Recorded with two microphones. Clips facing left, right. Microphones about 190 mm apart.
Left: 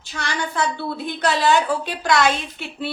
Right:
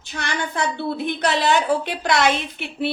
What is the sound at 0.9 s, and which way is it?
A woman's voice, 20° right (ahead or behind).